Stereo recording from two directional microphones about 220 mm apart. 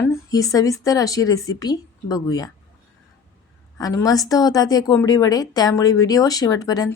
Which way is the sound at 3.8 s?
15° left (ahead or behind).